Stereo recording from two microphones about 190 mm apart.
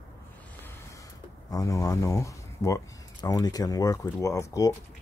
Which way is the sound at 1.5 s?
20° left (ahead or behind).